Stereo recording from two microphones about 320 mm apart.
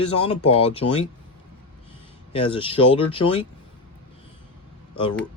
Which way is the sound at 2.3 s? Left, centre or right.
Centre.